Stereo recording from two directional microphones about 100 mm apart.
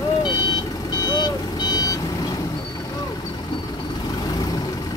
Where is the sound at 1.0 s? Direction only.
45° left (ahead or behind).